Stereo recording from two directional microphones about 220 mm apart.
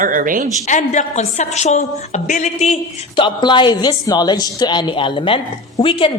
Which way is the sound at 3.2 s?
20° left (ahead or behind).